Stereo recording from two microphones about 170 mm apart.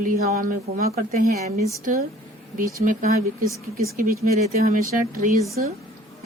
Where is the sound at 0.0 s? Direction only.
55° right (ahead or behind).